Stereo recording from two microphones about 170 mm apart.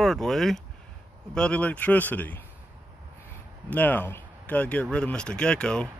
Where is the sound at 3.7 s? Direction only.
10° left (ahead or behind).